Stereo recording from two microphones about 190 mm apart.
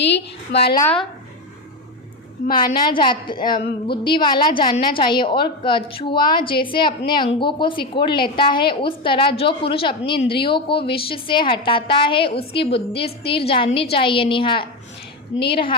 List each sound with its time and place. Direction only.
0.0 s a woman's voice: 60° left (ahead or behind)
2.6 s a woman's voice: 25° left (ahead or behind)